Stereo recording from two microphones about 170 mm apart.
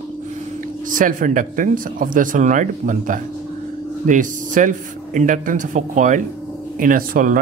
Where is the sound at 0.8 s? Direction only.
50° right (ahead or behind).